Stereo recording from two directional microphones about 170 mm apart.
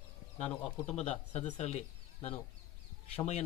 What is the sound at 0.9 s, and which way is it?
Speech, 40° left (ahead or behind).